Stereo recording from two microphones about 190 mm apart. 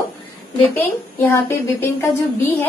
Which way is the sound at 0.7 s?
10° left (ahead or behind).